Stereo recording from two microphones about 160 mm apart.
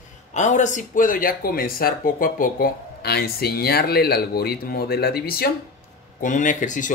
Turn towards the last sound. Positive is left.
turn(degrees=50)  # may be behind; listen again after turning